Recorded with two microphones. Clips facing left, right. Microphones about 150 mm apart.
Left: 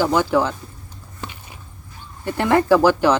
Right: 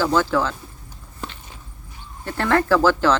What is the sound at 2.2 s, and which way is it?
Speech, 15° left (ahead or behind).